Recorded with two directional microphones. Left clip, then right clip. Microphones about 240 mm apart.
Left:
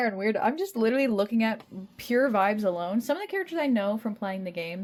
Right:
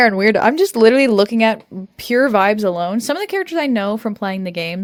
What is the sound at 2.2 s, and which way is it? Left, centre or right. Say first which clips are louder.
Speech: right 10 dB; right.